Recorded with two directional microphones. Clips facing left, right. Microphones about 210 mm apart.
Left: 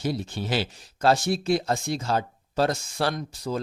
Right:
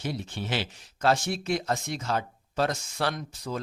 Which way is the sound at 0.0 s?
35° left (ahead or behind).